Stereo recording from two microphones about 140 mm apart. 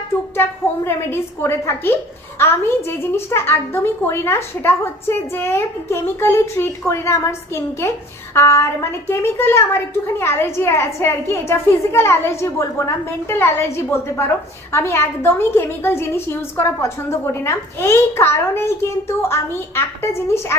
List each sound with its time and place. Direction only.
0.4 s a woman's voice: 15° left (ahead or behind)